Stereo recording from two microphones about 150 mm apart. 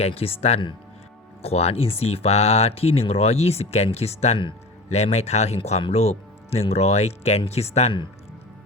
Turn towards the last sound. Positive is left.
turn(degrees=45)  # may be behind; listen again after turning